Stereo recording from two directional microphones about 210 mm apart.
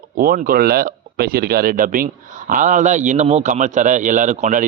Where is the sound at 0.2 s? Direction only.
45° right (ahead or behind).